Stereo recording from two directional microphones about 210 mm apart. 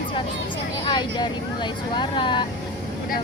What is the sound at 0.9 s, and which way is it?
Speech, 20° left (ahead or behind).